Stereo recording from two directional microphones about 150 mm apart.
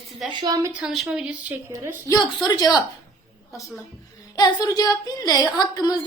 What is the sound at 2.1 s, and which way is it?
Speech, 25° left (ahead or behind).